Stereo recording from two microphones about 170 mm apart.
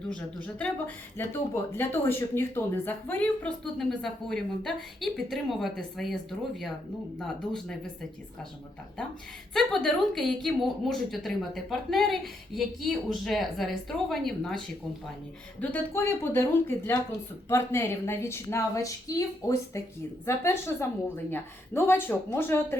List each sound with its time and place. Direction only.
0.1 s speech: 5° left (ahead or behind)
9.6 s a woman's voice: centre (ahead or behind)
15.6 s speech: 10° left (ahead or behind)